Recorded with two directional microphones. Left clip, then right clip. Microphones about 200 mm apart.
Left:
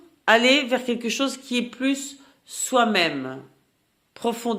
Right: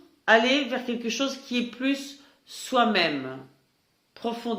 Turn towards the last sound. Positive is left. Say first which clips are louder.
# left 5 dB
turn(degrees=55)  # may be behind; listen again after turning